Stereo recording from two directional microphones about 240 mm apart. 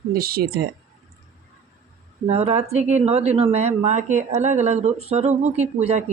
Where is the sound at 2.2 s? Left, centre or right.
Right.